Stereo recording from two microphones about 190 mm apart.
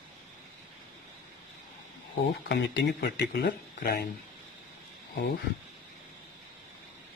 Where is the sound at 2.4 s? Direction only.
65° left (ahead or behind).